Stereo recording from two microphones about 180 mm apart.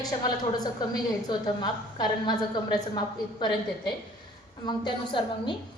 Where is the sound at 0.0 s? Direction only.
20° left (ahead or behind).